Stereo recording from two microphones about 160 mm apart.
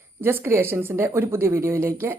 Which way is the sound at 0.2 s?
15° right (ahead or behind).